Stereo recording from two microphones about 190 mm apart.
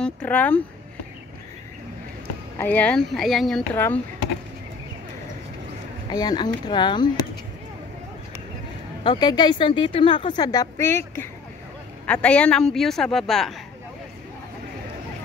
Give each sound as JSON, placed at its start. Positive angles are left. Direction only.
{"t": 0.0, "sound": "speech", "side_deg": 5}
{"t": 2.6, "sound": "speech", "side_deg": 10}
{"t": 6.0, "sound": "speech", "side_deg": 20}
{"t": 9.0, "sound": "speech", "side_deg": 25}